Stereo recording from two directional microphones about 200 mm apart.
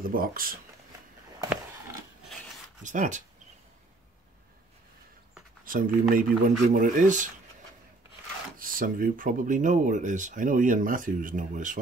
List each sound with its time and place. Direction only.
0.0 s speech: 45° right (ahead or behind)
1.4 s a sound: 15° right (ahead or behind)
2.8 s speech: 40° right (ahead or behind)
5.7 s speech: 45° right (ahead or behind)
8.5 s speech: 45° right (ahead or behind)